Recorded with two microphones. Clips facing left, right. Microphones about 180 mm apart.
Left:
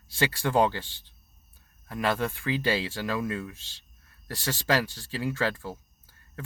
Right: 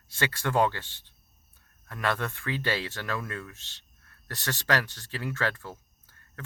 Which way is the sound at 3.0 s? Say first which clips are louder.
Left 5 dB; 10° left (ahead or behind).